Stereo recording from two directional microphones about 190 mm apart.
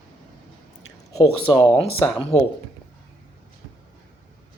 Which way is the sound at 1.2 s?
30° left (ahead or behind).